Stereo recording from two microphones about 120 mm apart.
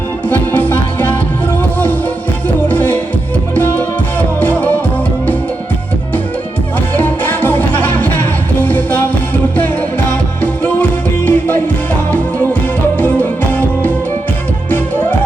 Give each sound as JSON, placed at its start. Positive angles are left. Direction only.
{"t": 0.3, "sound": "music", "side_deg": 15}
{"t": 2.6, "sound": "music", "side_deg": 15}
{"t": 6.9, "sound": "music", "side_deg": 15}
{"t": 13.0, "sound": "music", "side_deg": 15}